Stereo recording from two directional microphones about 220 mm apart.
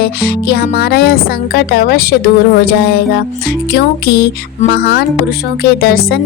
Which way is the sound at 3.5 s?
50° left (ahead or behind).